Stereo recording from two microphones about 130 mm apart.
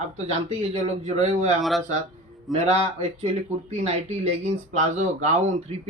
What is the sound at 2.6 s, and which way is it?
Speech, 55° right (ahead or behind).